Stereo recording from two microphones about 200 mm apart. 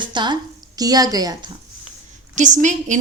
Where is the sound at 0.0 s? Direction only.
20° right (ahead or behind).